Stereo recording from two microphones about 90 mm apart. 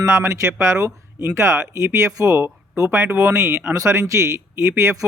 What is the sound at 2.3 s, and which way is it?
Speech, 25° right (ahead or behind).